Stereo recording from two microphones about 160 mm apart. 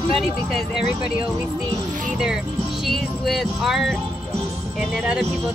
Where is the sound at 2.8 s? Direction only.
Centre (ahead or behind).